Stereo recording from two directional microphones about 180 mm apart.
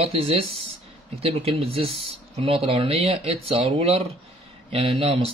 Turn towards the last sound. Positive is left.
turn(degrees=-35)  # may be behind; listen again after turning